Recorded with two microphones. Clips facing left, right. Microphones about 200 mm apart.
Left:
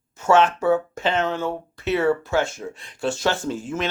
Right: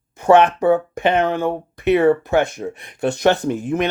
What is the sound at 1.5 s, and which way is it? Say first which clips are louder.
Speech: right 7 dB; 15° right (ahead or behind).